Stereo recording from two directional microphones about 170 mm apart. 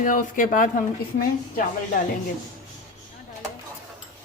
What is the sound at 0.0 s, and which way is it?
Speech, 50° left (ahead or behind).